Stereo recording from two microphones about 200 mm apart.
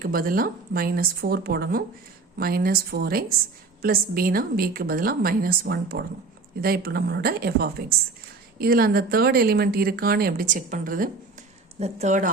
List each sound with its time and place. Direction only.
0.0 s a woman's voice: 45° right (ahead or behind)